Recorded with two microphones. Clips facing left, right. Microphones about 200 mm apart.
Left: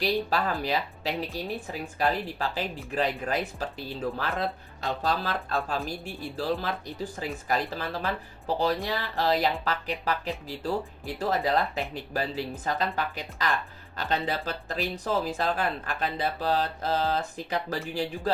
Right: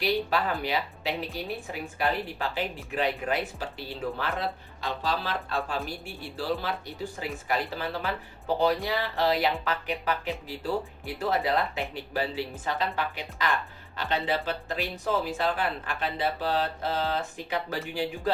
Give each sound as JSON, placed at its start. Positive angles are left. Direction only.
{"t": 0.0, "sound": "speech", "side_deg": 35}